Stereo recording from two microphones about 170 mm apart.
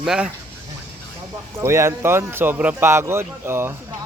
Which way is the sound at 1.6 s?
15° right (ahead or behind).